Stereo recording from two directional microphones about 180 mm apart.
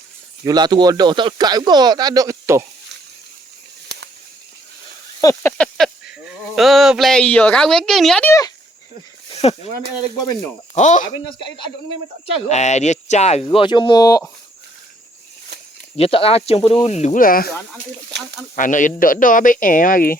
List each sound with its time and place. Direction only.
0.4 s speech: 25° right (ahead or behind)
5.2 s speech: 15° left (ahead or behind)
5.6 s speech: centre (ahead or behind)
8.3 s a sound: 20° left (ahead or behind)
9.3 s a sound: 35° left (ahead or behind)
10.8 s speech: 45° left (ahead or behind)
11.3 s speech: 25° left (ahead or behind)
16.0 s speech: 30° left (ahead or behind); by 17.5 s 50° left (ahead or behind)
18.1 s speech: 70° right (ahead or behind)
18.5 s speech: 45° left (ahead or behind)